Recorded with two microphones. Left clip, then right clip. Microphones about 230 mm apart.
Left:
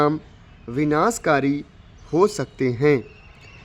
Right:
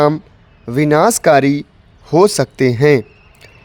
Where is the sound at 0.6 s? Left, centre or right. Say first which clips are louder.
Right 8 dB; right.